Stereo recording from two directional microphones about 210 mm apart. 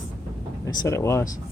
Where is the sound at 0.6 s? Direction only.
15° left (ahead or behind).